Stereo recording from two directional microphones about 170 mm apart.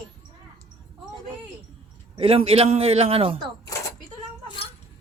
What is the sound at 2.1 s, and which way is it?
A man's voice, 35° right (ahead or behind).